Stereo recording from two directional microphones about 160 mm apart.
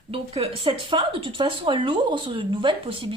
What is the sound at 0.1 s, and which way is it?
A woman's voice, 35° right (ahead or behind).